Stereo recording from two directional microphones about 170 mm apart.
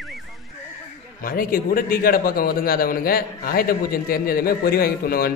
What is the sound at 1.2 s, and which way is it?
A man's voice, 55° left (ahead or behind).